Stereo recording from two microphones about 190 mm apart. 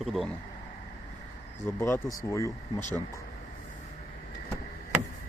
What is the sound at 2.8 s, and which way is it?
Speech, 40° left (ahead or behind).